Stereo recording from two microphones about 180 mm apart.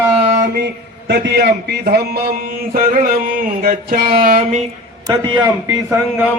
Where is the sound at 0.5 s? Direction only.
60° right (ahead or behind).